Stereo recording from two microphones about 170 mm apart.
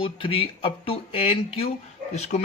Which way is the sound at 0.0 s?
35° left (ahead or behind).